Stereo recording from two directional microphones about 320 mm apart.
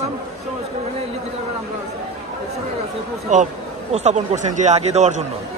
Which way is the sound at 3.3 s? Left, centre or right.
Right.